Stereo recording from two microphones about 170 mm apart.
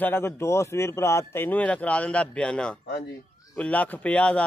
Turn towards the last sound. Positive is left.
turn(degrees=5)  # may be behind; listen again after turning